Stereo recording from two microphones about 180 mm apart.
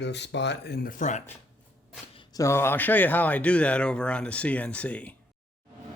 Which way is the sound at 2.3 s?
15° left (ahead or behind).